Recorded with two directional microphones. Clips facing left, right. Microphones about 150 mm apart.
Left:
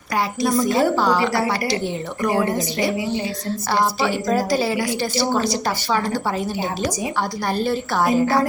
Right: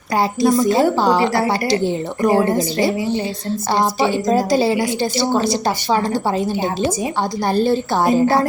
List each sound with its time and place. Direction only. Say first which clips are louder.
0.2 s a woman's voice: right 4 dB; 25° right (ahead or behind)